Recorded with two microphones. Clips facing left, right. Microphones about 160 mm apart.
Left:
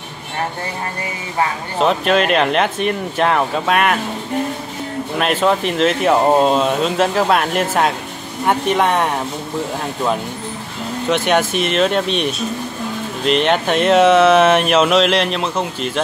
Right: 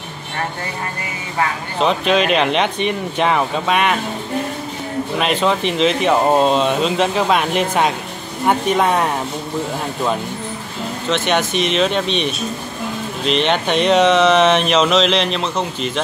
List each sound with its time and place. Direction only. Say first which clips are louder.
1.8 s speech: left 1 dB; centre (ahead or behind)
5.2 s speech: left 2 dB; 5° left (ahead or behind)
11.1 s speech: left 2 dB; 10° left (ahead or behind)